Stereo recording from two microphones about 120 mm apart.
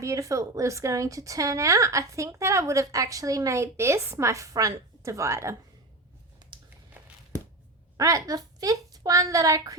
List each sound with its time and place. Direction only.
0.0 s a woman's voice: 25° right (ahead or behind)
7.0 s a sound: 10° right (ahead or behind)
7.9 s a woman's voice: 30° right (ahead or behind)